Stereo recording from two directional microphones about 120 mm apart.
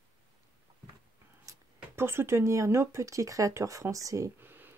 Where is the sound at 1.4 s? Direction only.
20° right (ahead or behind).